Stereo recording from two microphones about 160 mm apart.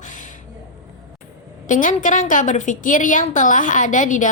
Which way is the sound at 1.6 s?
50° left (ahead or behind).